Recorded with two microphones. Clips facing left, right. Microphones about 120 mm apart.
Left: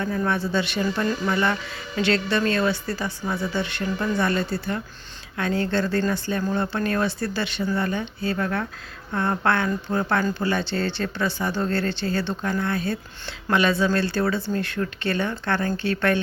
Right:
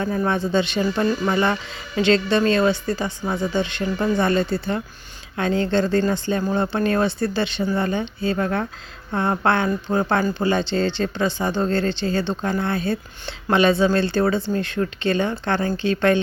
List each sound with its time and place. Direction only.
0.2 s speech: 20° right (ahead or behind)